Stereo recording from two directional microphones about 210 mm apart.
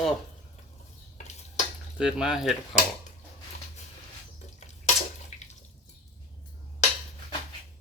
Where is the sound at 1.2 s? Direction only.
30° left (ahead or behind).